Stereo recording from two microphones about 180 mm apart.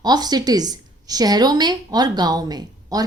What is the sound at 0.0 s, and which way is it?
A woman's voice, 20° right (ahead or behind).